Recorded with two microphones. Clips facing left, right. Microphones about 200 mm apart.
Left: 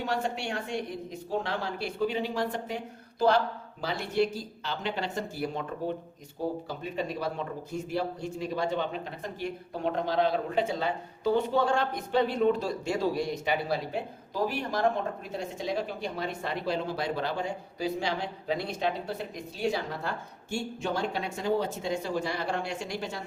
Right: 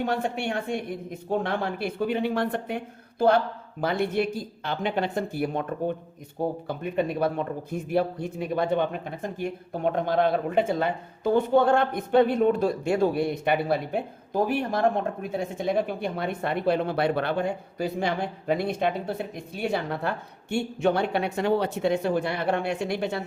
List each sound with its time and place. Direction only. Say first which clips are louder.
0.0 s speech: right 4 dB; 55° right (ahead or behind)
6.7 s speech: right 6 dB; 55° right (ahead or behind)